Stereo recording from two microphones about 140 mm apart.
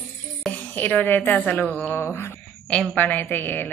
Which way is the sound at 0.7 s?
10° left (ahead or behind).